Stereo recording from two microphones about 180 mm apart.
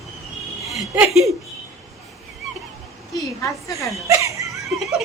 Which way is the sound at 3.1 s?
15° left (ahead or behind).